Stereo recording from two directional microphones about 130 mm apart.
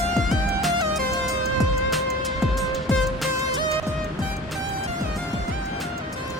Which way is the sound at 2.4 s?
Centre (ahead or behind).